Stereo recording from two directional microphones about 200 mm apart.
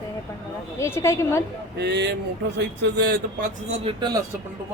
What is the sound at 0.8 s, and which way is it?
Speech, 15° left (ahead or behind).